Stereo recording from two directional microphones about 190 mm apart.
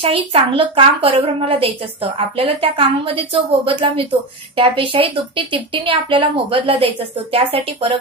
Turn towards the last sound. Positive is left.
turn(degrees=-30)  # may be behind; listen again after turning